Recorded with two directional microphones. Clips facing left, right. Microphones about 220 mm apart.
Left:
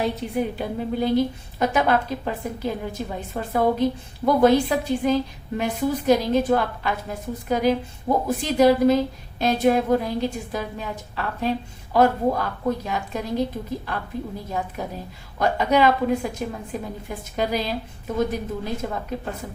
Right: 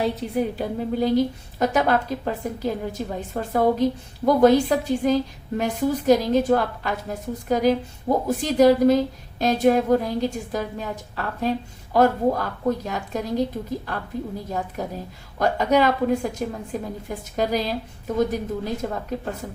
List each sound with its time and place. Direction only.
0.0 s a woman's voice: 35° right (ahead or behind)